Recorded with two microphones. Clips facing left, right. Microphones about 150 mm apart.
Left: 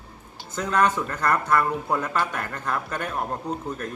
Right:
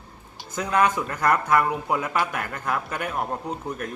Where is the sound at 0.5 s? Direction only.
10° right (ahead or behind).